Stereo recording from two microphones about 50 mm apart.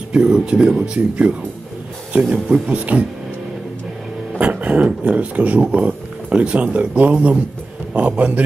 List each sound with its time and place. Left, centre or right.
0.1 s speech: centre
0.9 s speech: right
2.3 s speech: centre
2.7 s speech: right
4.4 s speech: right